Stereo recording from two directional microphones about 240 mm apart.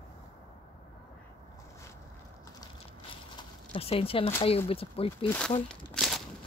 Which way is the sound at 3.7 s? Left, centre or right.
Left.